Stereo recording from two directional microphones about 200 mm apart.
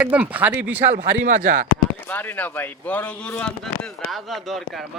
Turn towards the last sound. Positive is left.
turn(degrees=5)  # may be behind; listen again after turning